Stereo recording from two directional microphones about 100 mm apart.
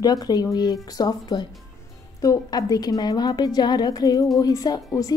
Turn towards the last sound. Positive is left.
turn(degrees=35)  # may be behind; listen again after turning